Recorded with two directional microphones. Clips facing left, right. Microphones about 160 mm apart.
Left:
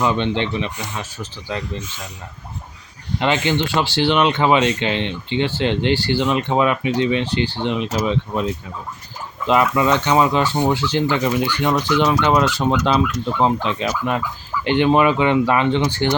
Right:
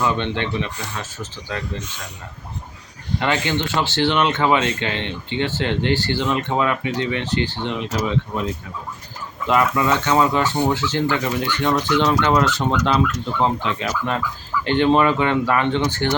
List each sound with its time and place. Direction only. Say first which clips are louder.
0.0 s speech: left 2 dB; 20° left (ahead or behind)
3.2 s speech: left 3 dB; 20° left (ahead or behind)
9.5 s speech: left 2 dB; 20° left (ahead or behind)